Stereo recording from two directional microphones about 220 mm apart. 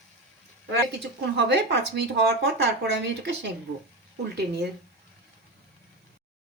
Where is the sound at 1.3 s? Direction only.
50° right (ahead or behind).